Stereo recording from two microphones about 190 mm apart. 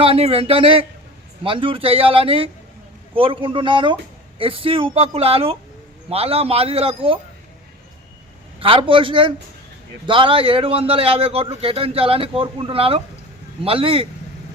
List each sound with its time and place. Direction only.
0.0 s a man's voice: 30° right (ahead or behind)
8.5 s a man's voice: 30° right (ahead or behind)